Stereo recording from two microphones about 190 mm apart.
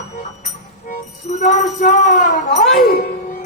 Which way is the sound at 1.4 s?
40° left (ahead or behind).